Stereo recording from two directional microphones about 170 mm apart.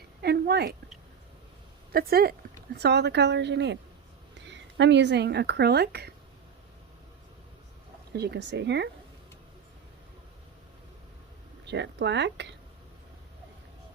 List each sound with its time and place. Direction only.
0.2 s a woman's voice: 70° right (ahead or behind)
1.9 s speech: 65° right (ahead or behind)
2.7 s speech: 75° right (ahead or behind)
8.1 s speech: 75° right (ahead or behind)
11.6 s speech: 90° right